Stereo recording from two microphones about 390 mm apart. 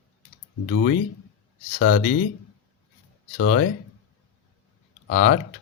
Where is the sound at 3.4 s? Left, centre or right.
Left.